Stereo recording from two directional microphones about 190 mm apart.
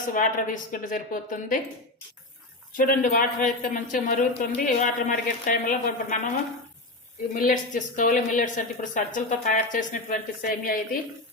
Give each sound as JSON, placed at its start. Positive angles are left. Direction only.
{"t": 0.1, "sound": "speech", "side_deg": 45}
{"t": 2.7, "sound": "speech", "side_deg": 45}
{"t": 7.3, "sound": "speech", "side_deg": 45}